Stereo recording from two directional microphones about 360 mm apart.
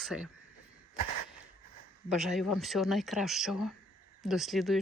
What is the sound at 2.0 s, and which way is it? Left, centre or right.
Speech, centre.